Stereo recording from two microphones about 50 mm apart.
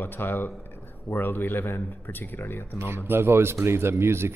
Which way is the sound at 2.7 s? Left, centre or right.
Right.